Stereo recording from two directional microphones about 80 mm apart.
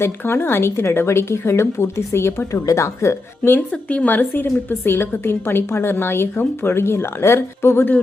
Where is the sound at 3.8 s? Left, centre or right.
Centre.